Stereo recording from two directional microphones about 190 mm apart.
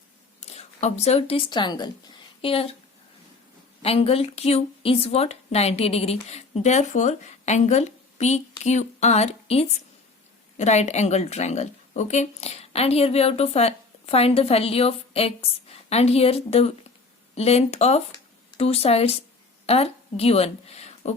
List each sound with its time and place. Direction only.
0.3 s speech: 35° left (ahead or behind)
3.8 s a woman's voice: 30° left (ahead or behind)